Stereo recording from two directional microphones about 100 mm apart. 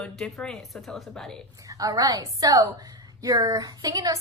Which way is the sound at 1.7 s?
35° right (ahead or behind).